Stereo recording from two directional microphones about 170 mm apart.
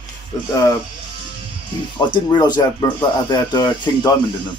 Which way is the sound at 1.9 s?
25° left (ahead or behind).